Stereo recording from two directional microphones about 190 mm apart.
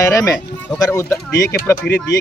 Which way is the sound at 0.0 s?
15° left (ahead or behind).